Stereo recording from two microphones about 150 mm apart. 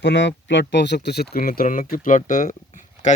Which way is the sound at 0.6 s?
90° left.